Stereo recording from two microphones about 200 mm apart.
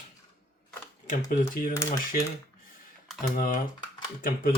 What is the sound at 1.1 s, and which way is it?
Speech, 45° left (ahead or behind).